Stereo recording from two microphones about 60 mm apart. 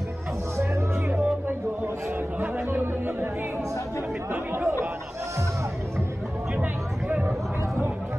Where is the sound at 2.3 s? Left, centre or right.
Right.